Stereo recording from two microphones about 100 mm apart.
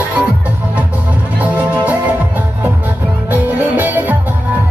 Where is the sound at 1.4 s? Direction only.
15° right (ahead or behind).